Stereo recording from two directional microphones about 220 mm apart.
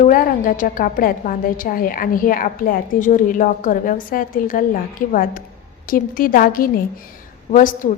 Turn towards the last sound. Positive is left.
turn(degrees=35)  # may be behind; listen again after turning